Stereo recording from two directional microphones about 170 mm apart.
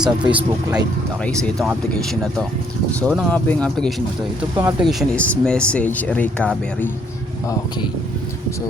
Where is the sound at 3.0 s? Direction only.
5° left (ahead or behind).